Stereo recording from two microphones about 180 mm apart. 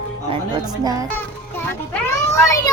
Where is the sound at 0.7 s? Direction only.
20° right (ahead or behind).